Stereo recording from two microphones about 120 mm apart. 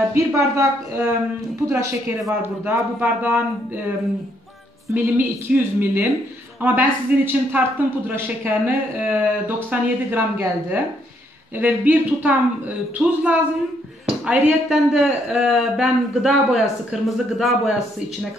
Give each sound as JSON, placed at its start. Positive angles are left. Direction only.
{"t": 0.1, "sound": "speech", "side_deg": -25}
{"t": 4.9, "sound": "a man's voice", "side_deg": -15}